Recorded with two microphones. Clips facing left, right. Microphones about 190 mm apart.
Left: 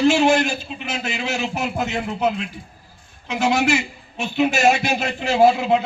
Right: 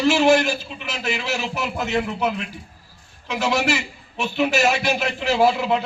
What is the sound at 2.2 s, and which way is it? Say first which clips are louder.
Speech: left 2 dB; 55° right (ahead or behind).